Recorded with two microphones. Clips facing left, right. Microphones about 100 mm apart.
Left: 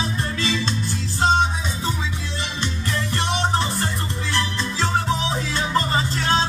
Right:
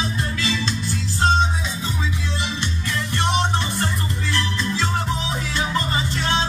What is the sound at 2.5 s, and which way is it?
Music, 35° left (ahead or behind).